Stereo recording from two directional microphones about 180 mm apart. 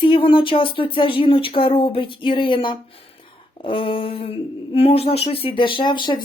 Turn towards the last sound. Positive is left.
turn(degrees=25)  # may be behind; listen again after turning